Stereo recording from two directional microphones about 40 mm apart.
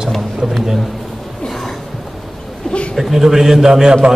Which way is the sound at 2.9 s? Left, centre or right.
Centre.